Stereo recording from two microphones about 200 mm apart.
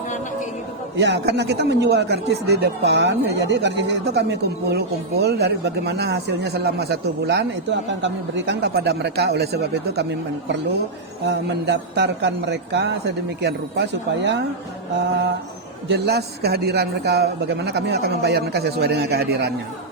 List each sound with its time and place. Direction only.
0.9 s speech: 60° right (ahead or behind)
11.3 s speech: 60° right (ahead or behind)
15.9 s speech: 55° right (ahead or behind)